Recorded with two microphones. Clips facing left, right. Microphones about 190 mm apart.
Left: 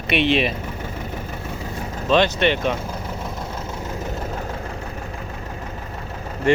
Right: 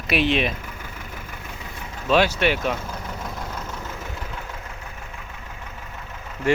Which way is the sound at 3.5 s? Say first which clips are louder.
Left 4 dB; 35° left (ahead or behind).